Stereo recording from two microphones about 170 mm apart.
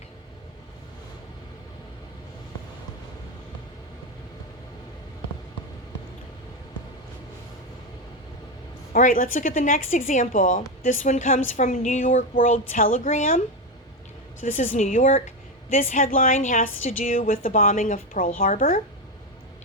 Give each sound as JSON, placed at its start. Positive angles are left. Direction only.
{"t": 8.9, "sound": "a woman's voice", "side_deg": 55}
{"t": 14.4, "sound": "a woman's voice", "side_deg": 50}